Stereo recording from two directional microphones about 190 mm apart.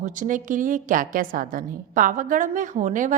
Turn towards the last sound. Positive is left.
turn(degrees=-45)  # may be behind; listen again after turning